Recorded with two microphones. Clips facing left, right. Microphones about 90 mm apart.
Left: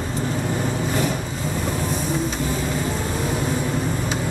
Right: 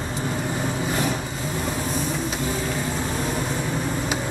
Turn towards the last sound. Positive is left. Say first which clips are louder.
# left 3 dB
turn(degrees=0)  # may be behind; listen again after turning